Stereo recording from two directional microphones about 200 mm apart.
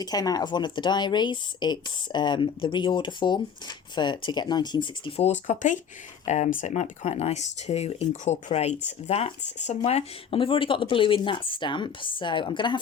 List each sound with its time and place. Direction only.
0.0 s speech: 20° left (ahead or behind)